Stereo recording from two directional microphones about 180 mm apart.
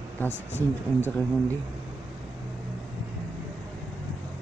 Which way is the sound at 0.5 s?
10° right (ahead or behind).